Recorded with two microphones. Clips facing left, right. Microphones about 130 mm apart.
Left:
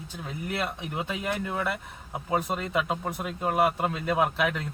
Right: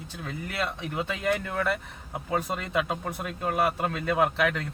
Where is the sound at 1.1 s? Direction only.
10° left (ahead or behind).